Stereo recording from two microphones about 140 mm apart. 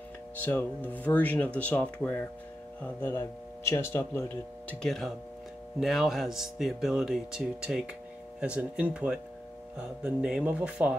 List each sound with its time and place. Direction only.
0.5 s speech: 15° left (ahead or behind)
4.8 s speech: 5° left (ahead or behind)